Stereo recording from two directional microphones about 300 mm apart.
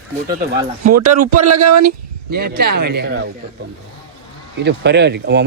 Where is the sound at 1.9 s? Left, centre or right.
Right.